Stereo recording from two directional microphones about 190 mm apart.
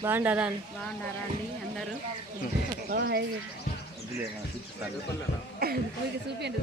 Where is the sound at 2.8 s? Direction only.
60° right (ahead or behind).